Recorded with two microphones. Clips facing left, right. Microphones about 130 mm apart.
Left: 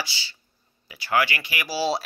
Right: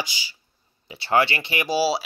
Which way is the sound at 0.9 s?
25° right (ahead or behind).